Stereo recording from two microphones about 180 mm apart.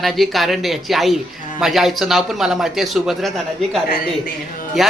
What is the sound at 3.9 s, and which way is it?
Speech, 55° left (ahead or behind).